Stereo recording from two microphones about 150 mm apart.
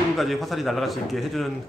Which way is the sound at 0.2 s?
Centre (ahead or behind).